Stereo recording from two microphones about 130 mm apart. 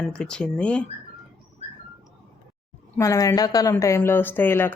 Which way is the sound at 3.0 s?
25° left (ahead or behind).